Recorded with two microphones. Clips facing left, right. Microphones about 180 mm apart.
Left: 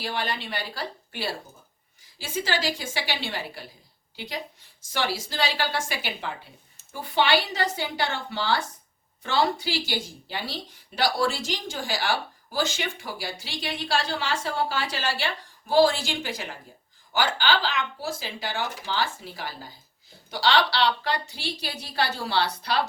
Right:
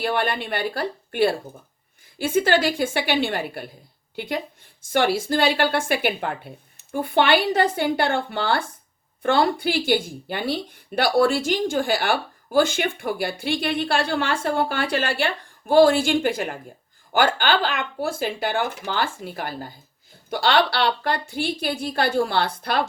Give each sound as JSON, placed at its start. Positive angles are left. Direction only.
{"t": 0.0, "sound": "a woman's voice", "side_deg": -55}